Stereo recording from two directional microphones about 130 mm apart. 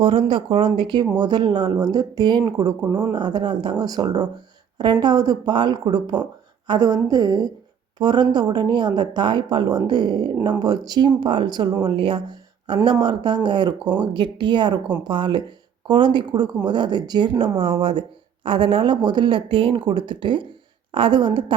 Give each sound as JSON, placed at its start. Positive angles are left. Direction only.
{"t": 0.0, "sound": "speech", "side_deg": -40}